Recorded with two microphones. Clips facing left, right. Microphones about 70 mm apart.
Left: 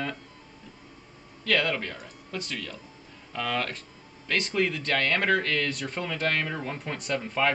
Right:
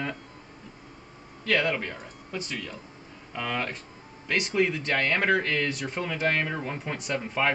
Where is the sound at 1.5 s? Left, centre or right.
Centre.